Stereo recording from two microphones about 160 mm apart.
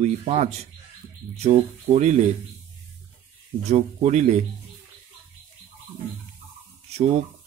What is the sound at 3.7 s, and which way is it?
Speech, 45° right (ahead or behind).